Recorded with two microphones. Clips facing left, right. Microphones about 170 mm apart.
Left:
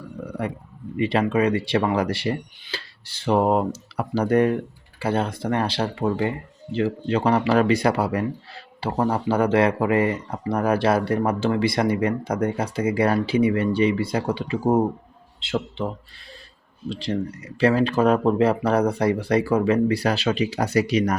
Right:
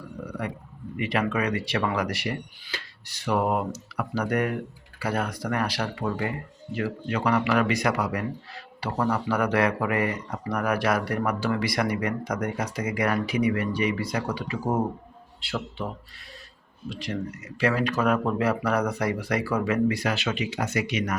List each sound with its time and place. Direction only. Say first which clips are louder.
0.2 s a sound: left 3 dB; 25° left (ahead or behind)
0.9 s speech: left 6 dB; 30° left (ahead or behind)
16.9 s speech: left 5 dB; 30° left (ahead or behind)